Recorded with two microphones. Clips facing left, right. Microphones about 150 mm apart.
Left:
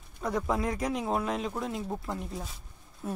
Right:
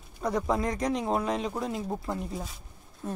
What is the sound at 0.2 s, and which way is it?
Speech, centre (ahead or behind).